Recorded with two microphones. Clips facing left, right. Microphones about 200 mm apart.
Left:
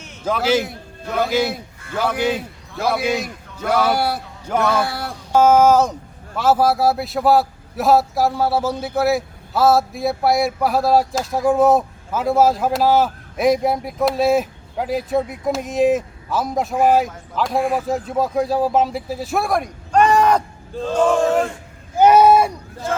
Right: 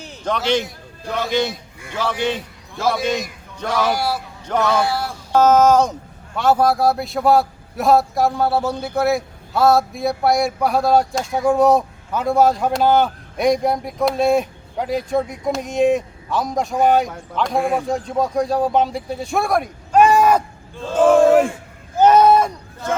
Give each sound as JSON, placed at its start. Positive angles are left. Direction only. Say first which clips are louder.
{"t": 0.3, "sound": "a man's voice", "louder": "left 1 dB", "side_deg": 5}
{"t": 3.7, "sound": "speech", "louder": "left 2 dB", "side_deg": 60}
{"t": 5.3, "sound": "a man's voice", "louder": "even", "side_deg": 10}
{"t": 21.9, "sound": "a sound", "louder": "left 1 dB", "side_deg": 10}